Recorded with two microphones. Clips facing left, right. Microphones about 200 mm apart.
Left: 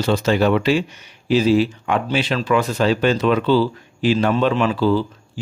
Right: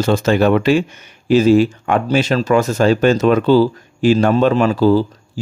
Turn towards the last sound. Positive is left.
turn(degrees=-40)  # may be behind; listen again after turning